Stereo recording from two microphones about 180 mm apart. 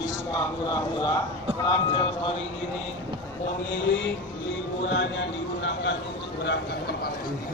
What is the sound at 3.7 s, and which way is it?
Speech, 90° left.